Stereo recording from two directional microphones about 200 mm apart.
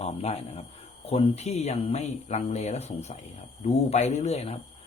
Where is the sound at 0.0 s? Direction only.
30° left (ahead or behind).